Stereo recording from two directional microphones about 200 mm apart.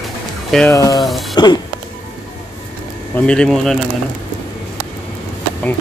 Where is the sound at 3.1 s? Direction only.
5° left (ahead or behind).